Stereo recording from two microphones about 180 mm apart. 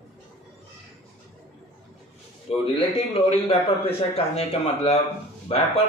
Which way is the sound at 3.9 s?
35° left (ahead or behind).